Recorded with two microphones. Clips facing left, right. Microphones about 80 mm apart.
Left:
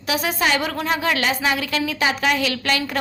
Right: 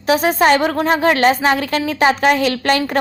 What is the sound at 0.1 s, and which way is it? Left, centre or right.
A woman's voice, right.